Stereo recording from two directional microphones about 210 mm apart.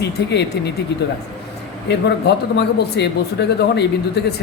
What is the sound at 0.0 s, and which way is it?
Speech, 55° left (ahead or behind).